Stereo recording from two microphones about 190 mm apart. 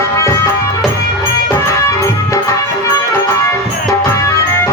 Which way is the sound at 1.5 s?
15° left (ahead or behind).